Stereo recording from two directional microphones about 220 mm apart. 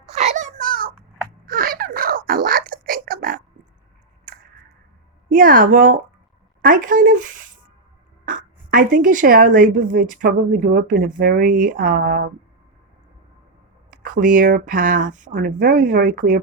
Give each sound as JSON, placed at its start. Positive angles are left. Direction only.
{"t": 0.1, "sound": "a sound", "side_deg": -30}
{"t": 5.3, "sound": "speech", "side_deg": -40}
{"t": 13.9, "sound": "speech", "side_deg": -35}